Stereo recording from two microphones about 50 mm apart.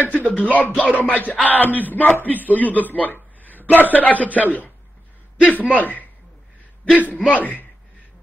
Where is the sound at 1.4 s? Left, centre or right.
Left.